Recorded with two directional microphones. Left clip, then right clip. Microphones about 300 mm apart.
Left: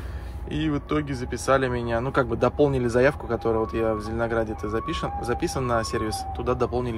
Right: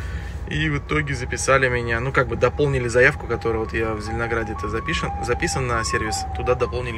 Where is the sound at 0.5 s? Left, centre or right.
Centre.